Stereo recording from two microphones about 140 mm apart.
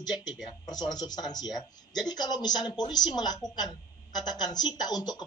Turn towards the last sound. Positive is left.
turn(degrees=30)  # may be behind; listen again after turning